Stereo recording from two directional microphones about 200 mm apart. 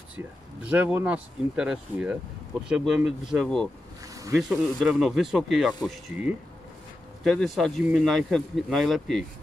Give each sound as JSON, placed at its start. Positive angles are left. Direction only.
{"t": 0.1, "sound": "speech", "side_deg": -5}
{"t": 4.1, "sound": "bee", "side_deg": -15}
{"t": 4.4, "sound": "speech", "side_deg": 0}